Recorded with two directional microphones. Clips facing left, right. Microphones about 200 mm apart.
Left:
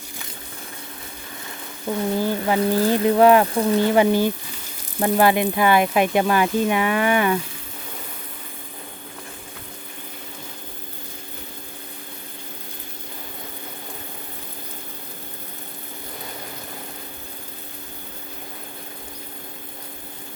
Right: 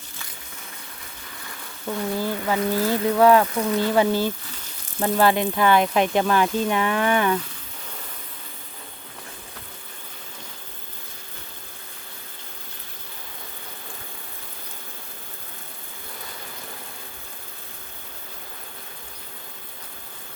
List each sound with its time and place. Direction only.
1.9 s speech: 15° left (ahead or behind)
3.4 s speech: 30° left (ahead or behind)
3.8 s speech: 15° left (ahead or behind)